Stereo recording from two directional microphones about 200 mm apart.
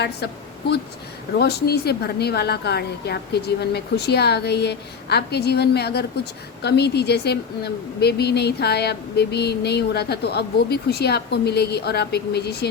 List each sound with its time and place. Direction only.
1.4 s a woman's voice: 50° left (ahead or behind)